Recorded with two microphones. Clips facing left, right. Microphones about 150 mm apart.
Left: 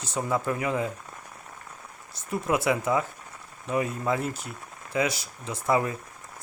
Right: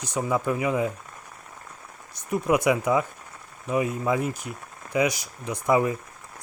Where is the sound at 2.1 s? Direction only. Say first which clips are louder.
Right 4 dB; 15° right (ahead or behind).